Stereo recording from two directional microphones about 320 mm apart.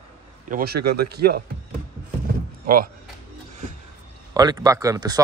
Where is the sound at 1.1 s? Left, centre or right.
Right.